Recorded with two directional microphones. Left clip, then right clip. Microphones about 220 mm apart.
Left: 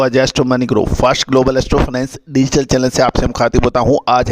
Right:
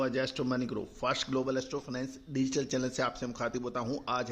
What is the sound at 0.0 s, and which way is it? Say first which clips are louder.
A man's voice: left 19 dB; 55° left (ahead or behind).